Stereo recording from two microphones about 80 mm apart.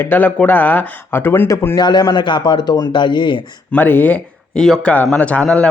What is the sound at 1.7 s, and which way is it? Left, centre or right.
A man's voice, left.